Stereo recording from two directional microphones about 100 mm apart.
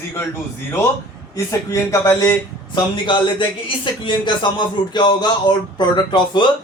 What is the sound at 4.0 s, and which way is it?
A man's voice, 50° left (ahead or behind).